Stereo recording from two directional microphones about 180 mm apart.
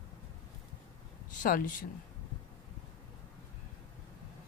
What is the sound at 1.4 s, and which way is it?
Speech, 50° left (ahead or behind).